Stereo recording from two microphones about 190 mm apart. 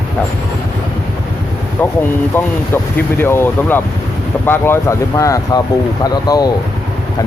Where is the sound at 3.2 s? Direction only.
10° left (ahead or behind).